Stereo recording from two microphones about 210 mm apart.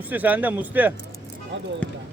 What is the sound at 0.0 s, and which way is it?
Speech, 10° right (ahead or behind).